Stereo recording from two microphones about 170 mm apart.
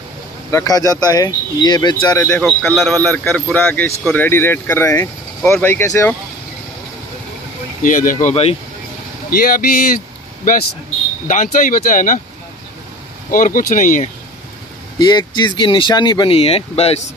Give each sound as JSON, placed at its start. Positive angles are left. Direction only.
{"t": 0.5, "sound": "speech", "side_deg": 20}
{"t": 2.4, "sound": "speech", "side_deg": 0}
{"t": 7.8, "sound": "speech", "side_deg": 50}
{"t": 9.3, "sound": "speech", "side_deg": 60}
{"t": 11.2, "sound": "speech", "side_deg": 50}
{"t": 13.3, "sound": "speech", "side_deg": 55}
{"t": 15.0, "sound": "speech", "side_deg": 25}